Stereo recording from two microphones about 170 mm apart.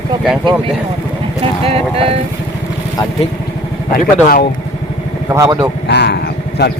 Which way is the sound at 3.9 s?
55° left (ahead or behind).